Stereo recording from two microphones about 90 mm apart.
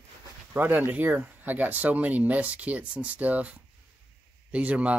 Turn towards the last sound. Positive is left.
turn(degrees=-15)  # may be behind; listen again after turning